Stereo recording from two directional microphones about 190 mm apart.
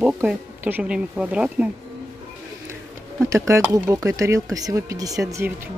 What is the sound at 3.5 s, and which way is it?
Speech, 15° right (ahead or behind).